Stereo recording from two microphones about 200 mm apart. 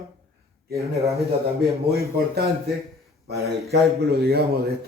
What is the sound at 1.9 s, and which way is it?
Speech, 50° right (ahead or behind).